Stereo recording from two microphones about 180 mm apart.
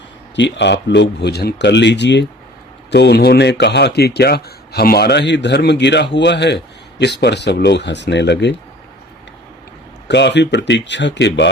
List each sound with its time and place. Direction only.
0.3 s a man's voice: 85° left
10.1 s speech: 75° left (ahead or behind)